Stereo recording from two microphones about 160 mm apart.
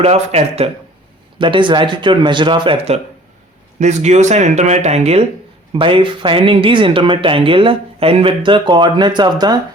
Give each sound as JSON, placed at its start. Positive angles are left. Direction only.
{"t": 0.0, "sound": "speech", "side_deg": -40}